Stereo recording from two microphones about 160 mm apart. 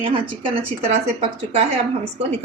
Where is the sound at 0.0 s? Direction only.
35° right (ahead or behind).